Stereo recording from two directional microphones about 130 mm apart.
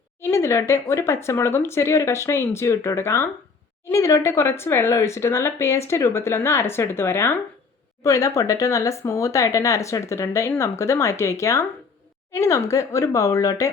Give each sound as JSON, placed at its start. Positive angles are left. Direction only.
{"t": 0.2, "sound": "speech", "side_deg": 20}